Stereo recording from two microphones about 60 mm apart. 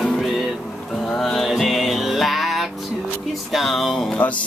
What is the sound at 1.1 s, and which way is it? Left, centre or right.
Music, centre.